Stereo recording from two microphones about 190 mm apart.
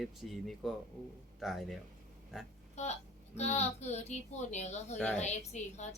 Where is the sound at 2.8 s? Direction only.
35° left (ahead or behind).